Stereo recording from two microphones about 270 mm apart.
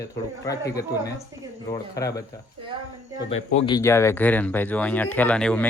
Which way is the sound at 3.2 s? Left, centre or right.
Left.